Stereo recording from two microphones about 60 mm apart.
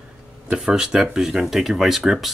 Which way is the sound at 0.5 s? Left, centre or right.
Centre.